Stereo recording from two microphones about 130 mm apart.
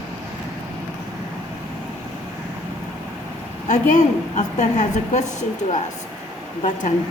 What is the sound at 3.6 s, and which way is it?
A woman's voice, 65° left (ahead or behind).